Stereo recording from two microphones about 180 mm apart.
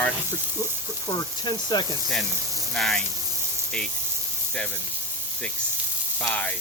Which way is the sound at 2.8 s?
5° left (ahead or behind).